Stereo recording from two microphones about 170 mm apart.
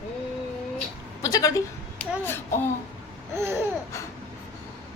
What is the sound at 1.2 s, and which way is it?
A woman's voice, 20° left (ahead or behind).